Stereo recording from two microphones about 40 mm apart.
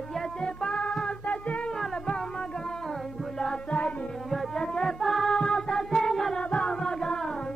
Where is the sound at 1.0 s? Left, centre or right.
Left.